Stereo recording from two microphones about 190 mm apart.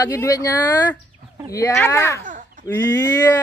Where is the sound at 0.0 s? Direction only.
15° left (ahead or behind).